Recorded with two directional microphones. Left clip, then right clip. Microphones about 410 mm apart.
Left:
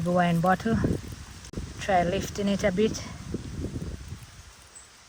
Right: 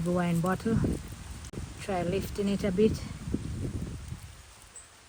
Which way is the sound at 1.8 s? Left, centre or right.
Centre.